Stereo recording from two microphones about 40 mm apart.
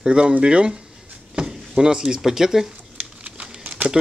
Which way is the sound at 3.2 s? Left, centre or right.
Right.